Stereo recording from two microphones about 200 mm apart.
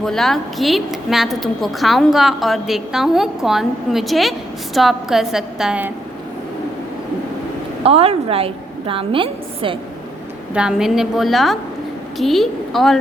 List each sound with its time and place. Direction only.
0.0 s a woman's voice: centre (ahead or behind)
7.9 s a woman's voice: 30° right (ahead or behind)
10.5 s a woman's voice: 5° right (ahead or behind)